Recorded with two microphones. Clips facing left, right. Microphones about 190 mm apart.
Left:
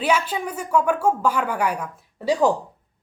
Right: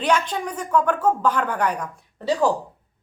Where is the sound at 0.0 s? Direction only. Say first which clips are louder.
Even; 5° left (ahead or behind).